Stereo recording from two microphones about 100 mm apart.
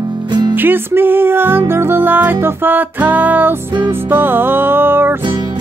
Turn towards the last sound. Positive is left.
turn(degrees=-20)  # may be behind; listen again after turning